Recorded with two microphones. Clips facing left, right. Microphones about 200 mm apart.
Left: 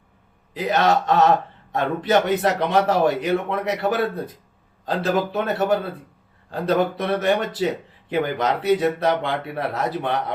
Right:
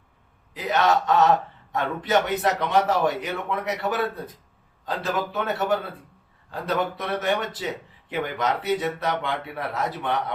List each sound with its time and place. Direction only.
0.5 s speech: 30° left (ahead or behind)